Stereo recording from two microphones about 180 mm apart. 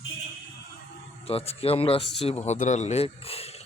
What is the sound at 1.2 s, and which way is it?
Speech, 35° left (ahead or behind).